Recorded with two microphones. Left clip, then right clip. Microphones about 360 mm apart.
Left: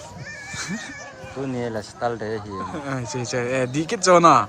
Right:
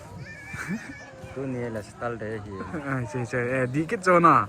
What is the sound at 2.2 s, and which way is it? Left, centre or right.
Speech, left.